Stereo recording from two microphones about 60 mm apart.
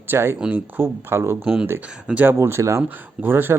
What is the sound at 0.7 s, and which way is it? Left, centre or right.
Speech, right.